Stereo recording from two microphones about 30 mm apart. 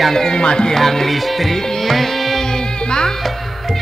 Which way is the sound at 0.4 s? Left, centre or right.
Left.